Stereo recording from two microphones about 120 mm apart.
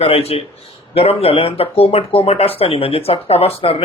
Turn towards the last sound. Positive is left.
turn(degrees=55)  # may be behind; listen again after turning